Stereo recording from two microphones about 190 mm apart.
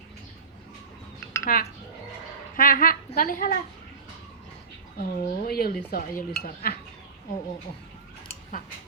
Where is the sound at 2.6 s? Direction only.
50° left (ahead or behind).